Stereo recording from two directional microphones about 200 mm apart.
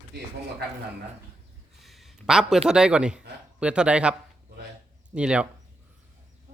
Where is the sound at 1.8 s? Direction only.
Centre (ahead or behind).